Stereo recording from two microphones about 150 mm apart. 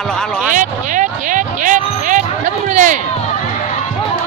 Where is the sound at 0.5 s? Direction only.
60° right (ahead or behind).